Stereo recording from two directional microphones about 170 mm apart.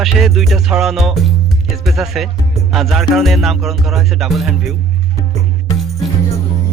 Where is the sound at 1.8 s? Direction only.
Centre (ahead or behind).